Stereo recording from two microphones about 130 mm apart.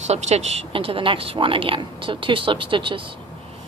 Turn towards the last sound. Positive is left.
turn(degrees=-40)  # may be behind; listen again after turning